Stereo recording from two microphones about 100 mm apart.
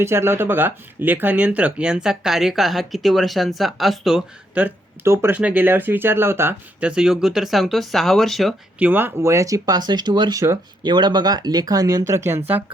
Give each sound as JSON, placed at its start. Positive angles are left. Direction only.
{"t": 0.0, "sound": "speech", "side_deg": -25}
{"t": 4.6, "sound": "speech", "side_deg": -25}
{"t": 5.4, "sound": "speech", "side_deg": -15}
{"t": 6.7, "sound": "speech", "side_deg": -10}
{"t": 8.8, "sound": "speech", "side_deg": -20}